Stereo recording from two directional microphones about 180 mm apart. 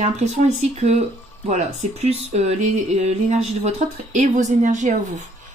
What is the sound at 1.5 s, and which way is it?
Speech, 40° right (ahead or behind).